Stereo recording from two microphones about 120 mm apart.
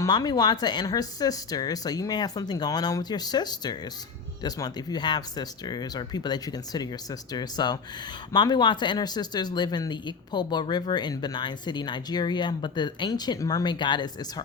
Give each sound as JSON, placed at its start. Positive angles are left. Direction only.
{"t": 0.0, "sound": "speech", "side_deg": 35}